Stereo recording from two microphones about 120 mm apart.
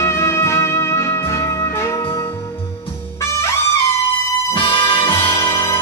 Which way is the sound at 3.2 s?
25° left (ahead or behind).